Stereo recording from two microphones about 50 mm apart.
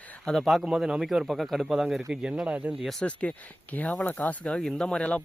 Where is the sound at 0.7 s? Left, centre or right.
Centre.